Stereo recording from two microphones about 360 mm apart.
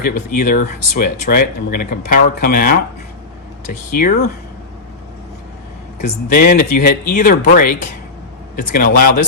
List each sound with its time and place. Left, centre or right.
0.0 s speech: left
6.0 s speech: left